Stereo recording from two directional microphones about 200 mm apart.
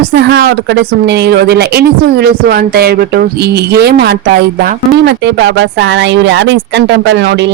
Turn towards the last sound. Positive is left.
turn(degrees=-60)  # may be behind; listen again after turning